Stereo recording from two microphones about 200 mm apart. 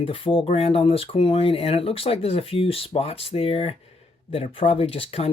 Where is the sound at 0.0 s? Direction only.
30° left (ahead or behind).